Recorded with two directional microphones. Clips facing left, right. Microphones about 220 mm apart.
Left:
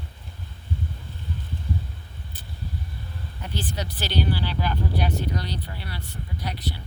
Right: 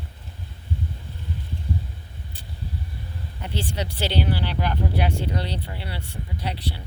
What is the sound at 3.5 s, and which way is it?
Speech, 25° right (ahead or behind).